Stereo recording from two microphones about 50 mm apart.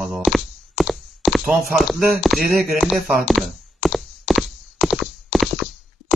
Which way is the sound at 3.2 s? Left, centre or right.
Centre.